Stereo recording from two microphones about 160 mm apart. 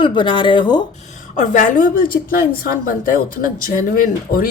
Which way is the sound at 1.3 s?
50° left (ahead or behind).